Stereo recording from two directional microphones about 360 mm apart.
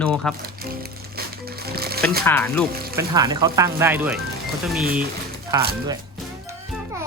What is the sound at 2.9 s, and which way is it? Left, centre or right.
Speech, centre.